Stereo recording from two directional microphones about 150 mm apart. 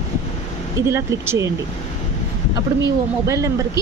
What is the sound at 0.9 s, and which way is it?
Speech, 15° right (ahead or behind).